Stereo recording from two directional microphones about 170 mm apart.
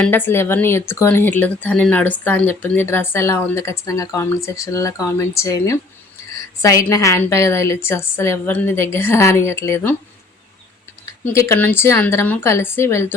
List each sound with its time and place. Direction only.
0.0 s speech: 10° left (ahead or behind)
11.0 s speech: 15° left (ahead or behind)